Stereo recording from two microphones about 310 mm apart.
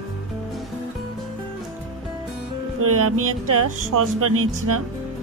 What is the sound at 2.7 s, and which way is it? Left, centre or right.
Speech, right.